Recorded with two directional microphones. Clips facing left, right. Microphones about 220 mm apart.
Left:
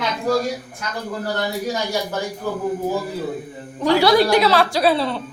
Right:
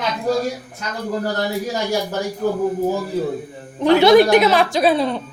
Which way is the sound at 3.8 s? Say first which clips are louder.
Right 4 dB; 20° right (ahead or behind).